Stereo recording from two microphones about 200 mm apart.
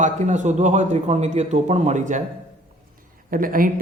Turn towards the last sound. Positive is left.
turn(degrees=-45)  # may be behind; listen again after turning